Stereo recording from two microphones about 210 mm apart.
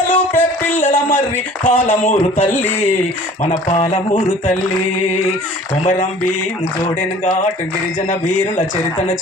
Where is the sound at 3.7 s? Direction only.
35° left (ahead or behind).